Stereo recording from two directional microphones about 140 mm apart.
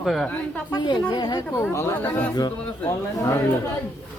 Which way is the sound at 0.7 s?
30° left (ahead or behind).